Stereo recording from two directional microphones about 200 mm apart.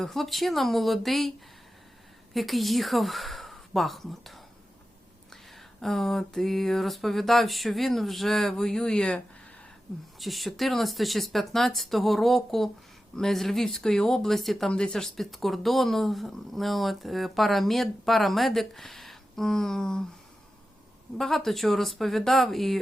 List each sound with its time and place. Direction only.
0.0 s speech: centre (ahead or behind)
2.3 s a woman's voice: centre (ahead or behind)
21.2 s speech: centre (ahead or behind)